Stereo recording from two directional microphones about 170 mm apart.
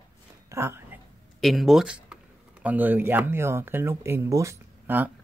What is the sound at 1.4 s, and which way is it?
Speech, centre (ahead or behind).